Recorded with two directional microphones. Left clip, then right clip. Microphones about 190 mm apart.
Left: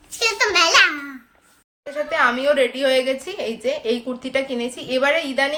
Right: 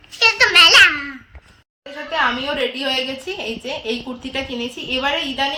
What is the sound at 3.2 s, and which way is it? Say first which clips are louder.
A woman's voice: left 2 dB; 5° left (ahead or behind).